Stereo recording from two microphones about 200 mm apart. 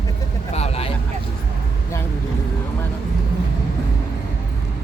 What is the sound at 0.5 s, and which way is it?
Vehicle, 30° left (ahead or behind).